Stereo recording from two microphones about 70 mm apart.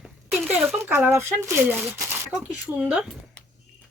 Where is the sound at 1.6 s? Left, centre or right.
Right.